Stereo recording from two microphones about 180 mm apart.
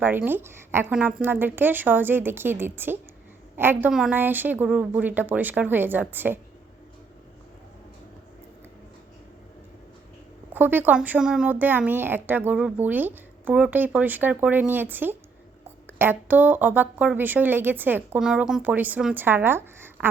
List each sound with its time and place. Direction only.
0.0 s speech: 10° right (ahead or behind)
10.5 s speech: 10° right (ahead or behind)